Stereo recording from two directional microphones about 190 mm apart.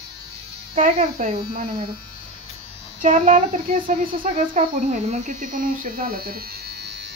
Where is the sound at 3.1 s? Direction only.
40° right (ahead or behind); by 7.1 s 60° right (ahead or behind).